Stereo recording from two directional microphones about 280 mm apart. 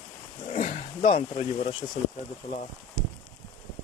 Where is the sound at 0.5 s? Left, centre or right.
Left.